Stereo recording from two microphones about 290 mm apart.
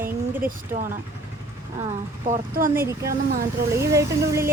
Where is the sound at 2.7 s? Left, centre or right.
Centre.